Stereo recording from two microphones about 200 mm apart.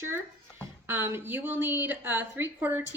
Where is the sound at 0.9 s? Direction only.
10° right (ahead or behind).